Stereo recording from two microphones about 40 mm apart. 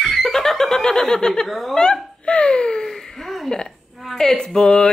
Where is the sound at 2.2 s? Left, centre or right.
Left.